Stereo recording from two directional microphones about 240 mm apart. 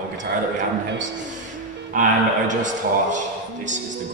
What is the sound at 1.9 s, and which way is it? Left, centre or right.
Speech, right.